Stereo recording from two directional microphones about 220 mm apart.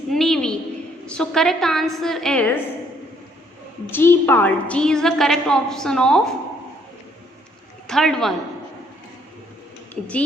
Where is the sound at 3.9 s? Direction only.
10° left (ahead or behind).